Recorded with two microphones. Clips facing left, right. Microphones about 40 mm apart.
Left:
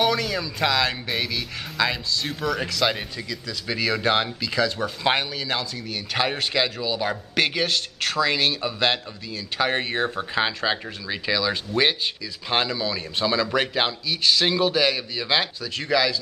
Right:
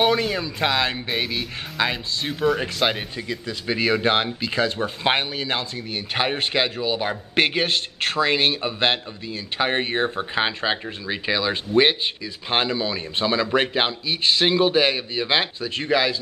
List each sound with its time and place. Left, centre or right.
0.0 s speech: right